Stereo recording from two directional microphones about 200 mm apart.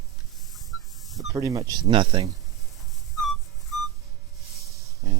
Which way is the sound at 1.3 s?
15° right (ahead or behind).